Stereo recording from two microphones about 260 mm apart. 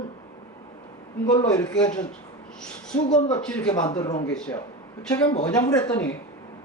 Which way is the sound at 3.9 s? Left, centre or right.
Centre.